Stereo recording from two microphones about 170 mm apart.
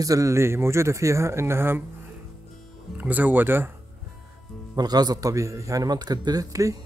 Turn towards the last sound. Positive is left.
turn(degrees=-20)  # may be behind; listen again after turning